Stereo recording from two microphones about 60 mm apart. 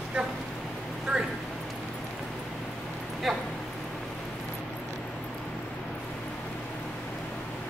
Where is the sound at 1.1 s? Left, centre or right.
Centre.